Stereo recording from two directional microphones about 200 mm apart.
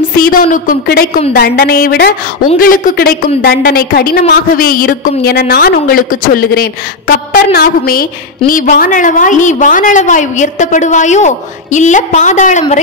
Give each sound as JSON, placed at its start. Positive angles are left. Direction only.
{"t": 0.1, "sound": "a woman's voice", "side_deg": 45}